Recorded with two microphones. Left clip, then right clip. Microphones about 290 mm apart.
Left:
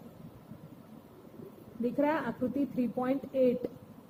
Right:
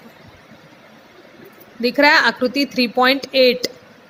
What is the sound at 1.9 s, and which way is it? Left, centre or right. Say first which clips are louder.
Speech: right 19 dB; right.